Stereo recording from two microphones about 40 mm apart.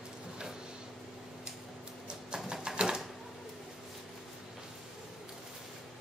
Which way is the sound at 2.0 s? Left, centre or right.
Centre.